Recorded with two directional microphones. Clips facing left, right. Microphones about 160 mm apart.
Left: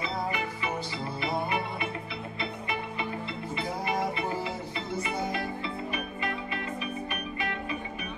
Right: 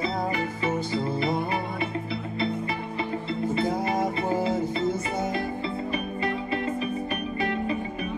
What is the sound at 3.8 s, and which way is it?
Music, 40° right (ahead or behind).